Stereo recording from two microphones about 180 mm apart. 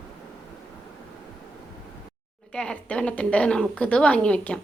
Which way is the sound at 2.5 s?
5° left (ahead or behind).